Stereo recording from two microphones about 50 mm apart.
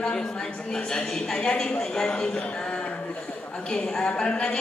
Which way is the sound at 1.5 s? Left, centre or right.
Left.